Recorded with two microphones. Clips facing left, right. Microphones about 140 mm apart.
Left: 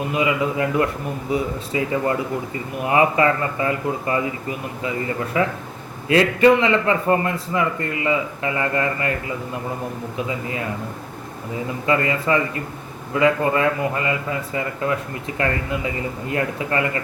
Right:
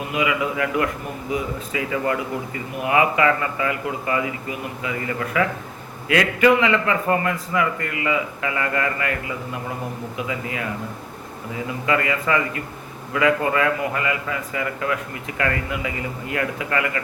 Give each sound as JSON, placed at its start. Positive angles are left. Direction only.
{"t": 0.1, "sound": "a man's voice", "side_deg": 30}
{"t": 10.2, "sound": "a man's voice", "side_deg": 30}
{"t": 11.9, "sound": "a man's voice", "side_deg": 30}